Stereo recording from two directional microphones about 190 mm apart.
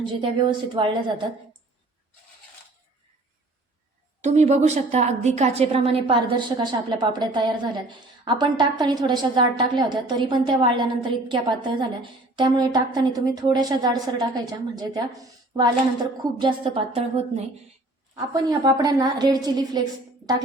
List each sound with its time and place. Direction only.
0.2 s a woman's voice: 25° right (ahead or behind)
4.2 s a woman's voice: 35° right (ahead or behind); by 19.8 s 20° right (ahead or behind)